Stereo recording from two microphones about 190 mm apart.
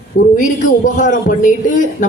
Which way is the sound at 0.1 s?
50° left (ahead or behind).